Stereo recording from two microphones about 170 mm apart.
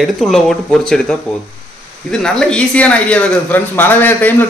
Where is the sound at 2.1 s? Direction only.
5° left (ahead or behind).